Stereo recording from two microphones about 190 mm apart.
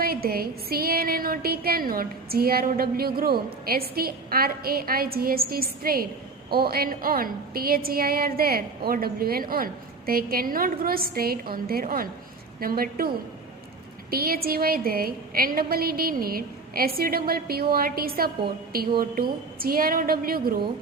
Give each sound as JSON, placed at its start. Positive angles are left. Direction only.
{"t": 0.0, "sound": "a woman's voice", "side_deg": -50}
{"t": 14.1, "sound": "a woman's voice", "side_deg": -50}